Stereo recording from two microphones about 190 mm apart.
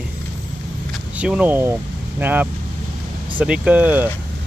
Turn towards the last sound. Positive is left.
turn(degrees=-10)  # may be behind; listen again after turning